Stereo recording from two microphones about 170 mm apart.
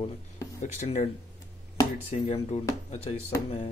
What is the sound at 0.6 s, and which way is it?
Speech, 40° left (ahead or behind).